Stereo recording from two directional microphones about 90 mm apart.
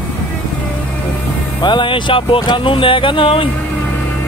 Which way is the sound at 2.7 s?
75° left (ahead or behind).